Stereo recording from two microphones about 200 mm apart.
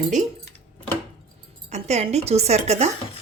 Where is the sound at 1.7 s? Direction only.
35° right (ahead or behind).